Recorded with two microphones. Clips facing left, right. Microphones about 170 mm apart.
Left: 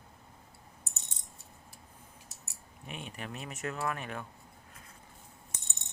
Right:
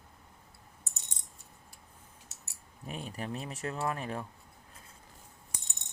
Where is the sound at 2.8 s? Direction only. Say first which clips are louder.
Right 4 dB; 35° right (ahead or behind).